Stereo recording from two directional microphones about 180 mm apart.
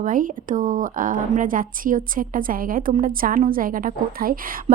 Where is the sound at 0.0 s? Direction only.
50° right (ahead or behind).